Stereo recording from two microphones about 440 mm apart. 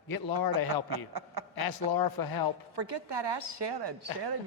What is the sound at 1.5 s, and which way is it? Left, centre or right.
Speech, left.